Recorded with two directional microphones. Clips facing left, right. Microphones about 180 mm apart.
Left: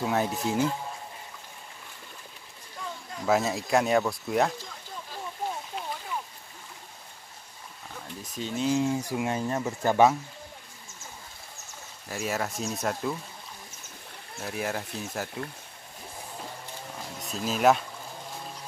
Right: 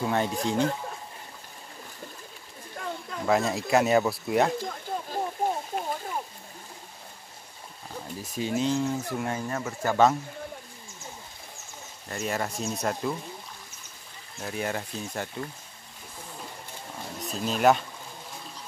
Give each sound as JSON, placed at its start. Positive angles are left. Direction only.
{"t": 0.0, "sound": "speech", "side_deg": 0}
{"t": 2.8, "sound": "a sound", "side_deg": -55}
{"t": 3.3, "sound": "speech", "side_deg": 0}
{"t": 4.6, "sound": "a sound", "side_deg": -55}
{"t": 5.5, "sound": "a sound", "side_deg": -45}
{"t": 7.9, "sound": "speech", "side_deg": -10}
{"t": 8.6, "sound": "speech", "side_deg": 10}
{"t": 12.1, "sound": "speech", "side_deg": 5}
{"t": 14.4, "sound": "speech", "side_deg": 0}
{"t": 17.2, "sound": "speech", "side_deg": 0}